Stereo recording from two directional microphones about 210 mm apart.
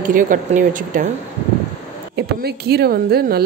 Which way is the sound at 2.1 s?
50° right (ahead or behind).